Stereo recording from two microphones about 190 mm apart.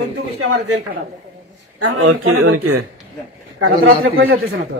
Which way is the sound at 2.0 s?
90° right.